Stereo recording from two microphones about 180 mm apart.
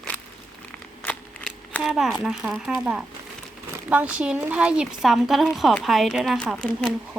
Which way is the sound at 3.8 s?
5° right (ahead or behind).